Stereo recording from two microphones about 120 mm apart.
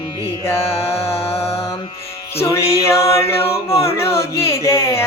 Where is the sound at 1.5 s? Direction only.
25° left (ahead or behind).